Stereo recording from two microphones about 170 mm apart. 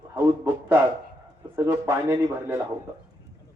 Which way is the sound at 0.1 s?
15° right (ahead or behind).